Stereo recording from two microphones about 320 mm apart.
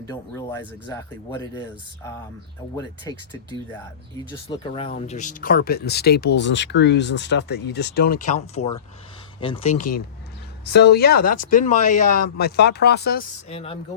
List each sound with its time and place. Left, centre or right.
0.1 s speech: centre
2.7 s speech: centre
4.3 s speech: centre; by 13.2 s left
13.5 s speech: centre